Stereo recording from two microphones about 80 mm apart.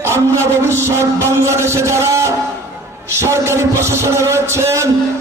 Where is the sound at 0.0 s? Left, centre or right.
Right.